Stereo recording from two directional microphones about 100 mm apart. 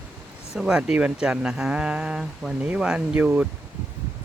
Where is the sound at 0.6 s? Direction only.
10° right (ahead or behind).